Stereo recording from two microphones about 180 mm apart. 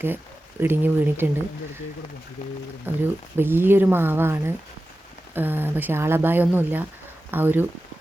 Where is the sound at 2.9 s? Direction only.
10° right (ahead or behind).